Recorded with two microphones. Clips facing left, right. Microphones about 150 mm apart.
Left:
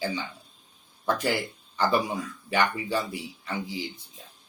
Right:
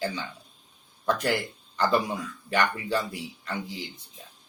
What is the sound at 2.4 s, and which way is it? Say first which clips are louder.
Speech: even; 10° left (ahead or behind).